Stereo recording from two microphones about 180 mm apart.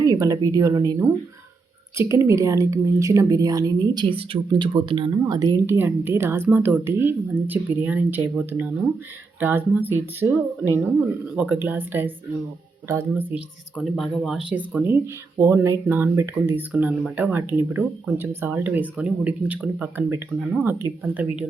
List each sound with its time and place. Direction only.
0.0 s speech: 20° right (ahead or behind)
2.0 s a woman's voice: 15° right (ahead or behind)
13.7 s a woman's voice: centre (ahead or behind)